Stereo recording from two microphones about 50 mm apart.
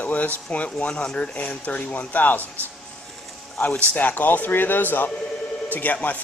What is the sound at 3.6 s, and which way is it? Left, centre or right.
A man's voice, left.